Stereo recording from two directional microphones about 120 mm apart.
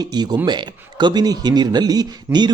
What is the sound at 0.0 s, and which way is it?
Speech, 35° right (ahead or behind).